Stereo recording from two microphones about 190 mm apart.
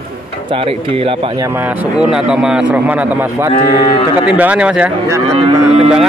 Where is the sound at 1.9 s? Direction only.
5° right (ahead or behind).